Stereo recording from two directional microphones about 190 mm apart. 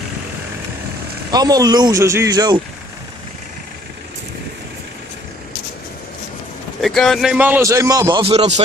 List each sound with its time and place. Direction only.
1.3 s speech: 20° right (ahead or behind)
6.8 s a man's voice: centre (ahead or behind); by 8.6 s 35° right (ahead or behind)